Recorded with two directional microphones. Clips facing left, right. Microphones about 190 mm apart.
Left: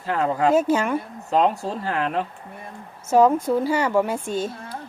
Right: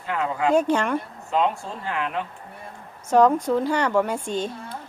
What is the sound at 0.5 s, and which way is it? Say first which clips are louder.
Speech: left 1 dB; 5° left (ahead or behind).